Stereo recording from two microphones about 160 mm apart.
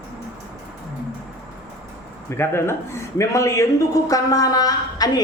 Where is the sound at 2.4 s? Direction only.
15° left (ahead or behind).